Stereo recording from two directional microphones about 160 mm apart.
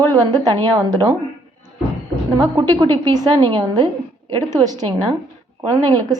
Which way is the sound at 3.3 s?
35° right (ahead or behind).